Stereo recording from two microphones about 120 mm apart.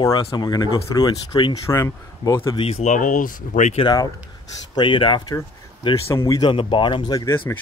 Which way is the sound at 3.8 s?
35° left (ahead or behind).